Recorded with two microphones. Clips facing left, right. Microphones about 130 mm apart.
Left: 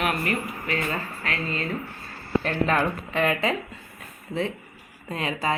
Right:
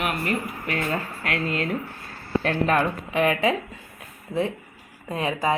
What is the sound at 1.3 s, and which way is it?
Speech, 60° right (ahead or behind).